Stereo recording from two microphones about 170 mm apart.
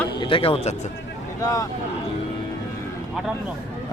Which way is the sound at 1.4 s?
20° left (ahead or behind).